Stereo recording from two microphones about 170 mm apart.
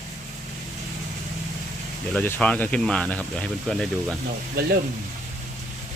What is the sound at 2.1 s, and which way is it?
Speech, 10° left (ahead or behind).